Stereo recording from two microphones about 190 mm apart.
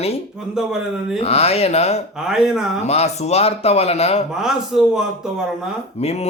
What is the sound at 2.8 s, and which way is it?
Speech, 35° left (ahead or behind).